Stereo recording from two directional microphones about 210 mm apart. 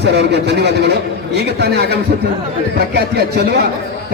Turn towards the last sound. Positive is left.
turn(degrees=-50)  # may be behind; listen again after turning